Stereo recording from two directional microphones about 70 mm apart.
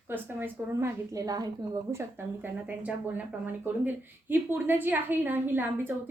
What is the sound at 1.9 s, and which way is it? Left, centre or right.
Speech, right.